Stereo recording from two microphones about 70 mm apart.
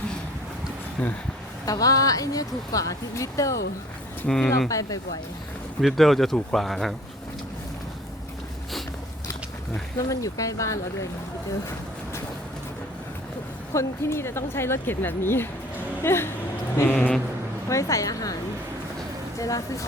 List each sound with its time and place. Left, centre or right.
1.6 s speech: left
4.3 s speech: centre
4.7 s speech: left
5.8 s speech: centre
10.0 s speech: left
13.7 s speech: left
16.9 s speech: centre
17.7 s speech: left
19.4 s speech: left